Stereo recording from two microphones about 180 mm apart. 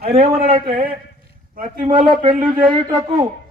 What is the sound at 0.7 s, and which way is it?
Speech, 55° right (ahead or behind).